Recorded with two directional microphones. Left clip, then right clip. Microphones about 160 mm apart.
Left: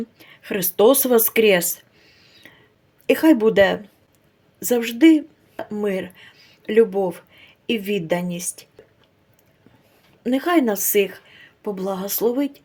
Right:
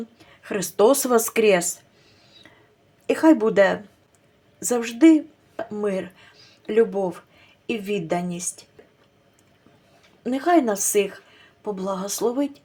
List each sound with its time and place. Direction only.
0.2 s speech: 30° left (ahead or behind)
2.2 s a sound: 35° left (ahead or behind)
3.1 s speech: 25° left (ahead or behind)
10.2 s speech: 25° left (ahead or behind)